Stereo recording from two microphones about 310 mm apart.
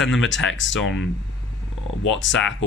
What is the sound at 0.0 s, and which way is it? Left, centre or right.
Speech, left.